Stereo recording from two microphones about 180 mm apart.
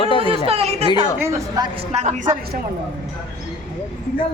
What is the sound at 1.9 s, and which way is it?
Speech, 40° right (ahead or behind).